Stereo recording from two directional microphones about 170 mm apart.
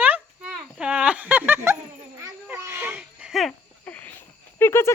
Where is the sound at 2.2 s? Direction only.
15° right (ahead or behind).